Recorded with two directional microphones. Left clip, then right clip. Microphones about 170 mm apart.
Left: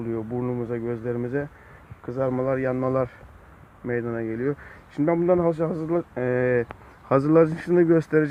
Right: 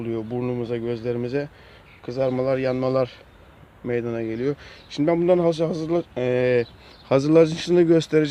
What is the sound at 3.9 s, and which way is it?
Speech, 25° right (ahead or behind).